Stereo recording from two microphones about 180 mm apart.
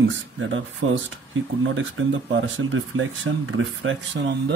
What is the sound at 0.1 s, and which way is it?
Speech, 90° right.